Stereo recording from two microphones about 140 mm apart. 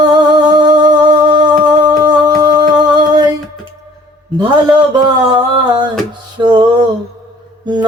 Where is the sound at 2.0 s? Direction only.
30° right (ahead or behind).